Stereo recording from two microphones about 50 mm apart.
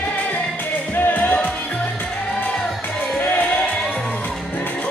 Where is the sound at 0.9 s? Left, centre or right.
Left.